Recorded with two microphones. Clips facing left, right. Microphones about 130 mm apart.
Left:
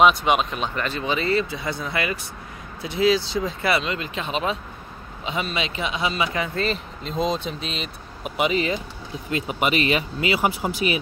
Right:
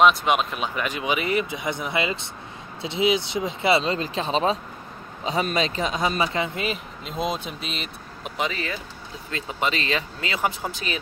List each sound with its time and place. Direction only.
0.0 s a man's voice: centre (ahead or behind); by 6.3 s 40° right (ahead or behind)
6.3 s speech: 25° right (ahead or behind)
6.6 s speech: 5° right (ahead or behind)
8.4 s speech: 20° left (ahead or behind)